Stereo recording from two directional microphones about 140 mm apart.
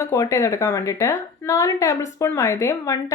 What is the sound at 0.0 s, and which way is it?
Speech, 20° left (ahead or behind).